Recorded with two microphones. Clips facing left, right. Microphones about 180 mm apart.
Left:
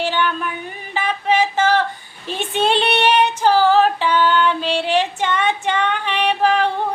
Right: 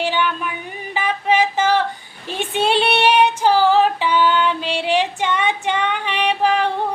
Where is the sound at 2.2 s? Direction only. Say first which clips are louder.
Even; 15° right (ahead or behind).